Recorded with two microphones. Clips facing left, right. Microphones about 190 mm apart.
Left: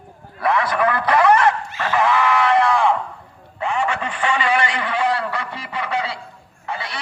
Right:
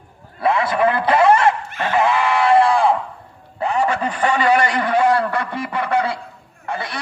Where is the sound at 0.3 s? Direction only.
25° right (ahead or behind).